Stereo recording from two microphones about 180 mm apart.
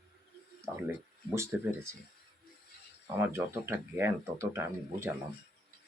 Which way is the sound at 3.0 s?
10° right (ahead or behind).